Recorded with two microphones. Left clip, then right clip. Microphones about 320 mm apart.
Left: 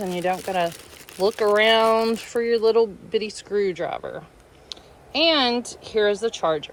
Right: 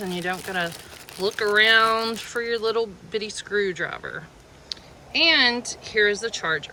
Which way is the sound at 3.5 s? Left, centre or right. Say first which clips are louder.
Left 1 dB; centre.